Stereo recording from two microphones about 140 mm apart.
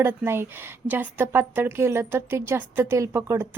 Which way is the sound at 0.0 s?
15° right (ahead or behind).